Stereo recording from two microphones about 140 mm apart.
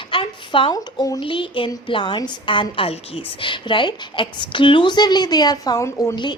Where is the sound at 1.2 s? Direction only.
35° left (ahead or behind); by 6.1 s 20° left (ahead or behind).